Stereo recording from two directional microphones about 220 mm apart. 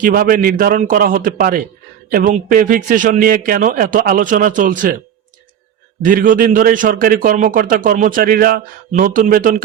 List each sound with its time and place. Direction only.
0.0 s a man's voice: 40° right (ahead or behind)
6.0 s a man's voice: 40° right (ahead or behind)